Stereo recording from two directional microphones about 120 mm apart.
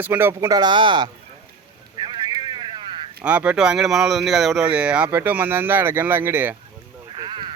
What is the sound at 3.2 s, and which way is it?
Speech, 10° right (ahead or behind).